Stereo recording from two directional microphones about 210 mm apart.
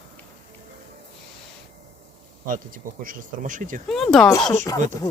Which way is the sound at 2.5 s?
40° right (ahead or behind).